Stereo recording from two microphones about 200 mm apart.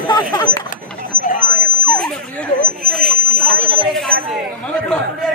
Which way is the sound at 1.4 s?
50° right (ahead or behind).